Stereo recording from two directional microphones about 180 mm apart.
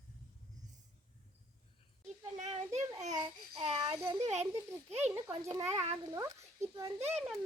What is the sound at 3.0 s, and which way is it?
Babbling, 35° right (ahead or behind).